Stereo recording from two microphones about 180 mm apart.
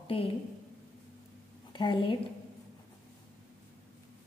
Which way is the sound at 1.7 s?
25° left (ahead or behind).